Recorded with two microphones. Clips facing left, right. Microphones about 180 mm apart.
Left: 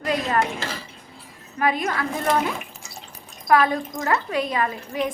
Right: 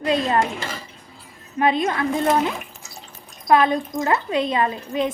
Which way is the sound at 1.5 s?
25° right (ahead or behind).